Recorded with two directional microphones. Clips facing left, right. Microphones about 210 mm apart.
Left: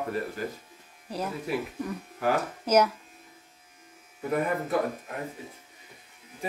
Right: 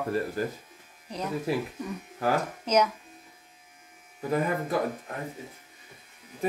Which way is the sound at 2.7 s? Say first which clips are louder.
Left 2 dB; 10° left (ahead or behind).